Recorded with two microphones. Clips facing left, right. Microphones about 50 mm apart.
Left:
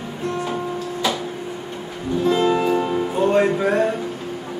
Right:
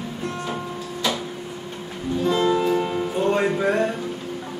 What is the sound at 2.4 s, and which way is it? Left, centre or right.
Music, left.